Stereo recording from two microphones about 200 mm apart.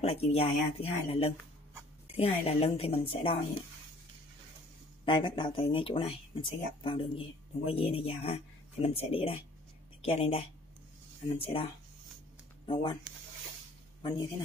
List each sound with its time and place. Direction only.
0.0 s speech: 30° left (ahead or behind)
5.0 s speech: 25° left (ahead or behind)
12.6 s speech: 25° left (ahead or behind)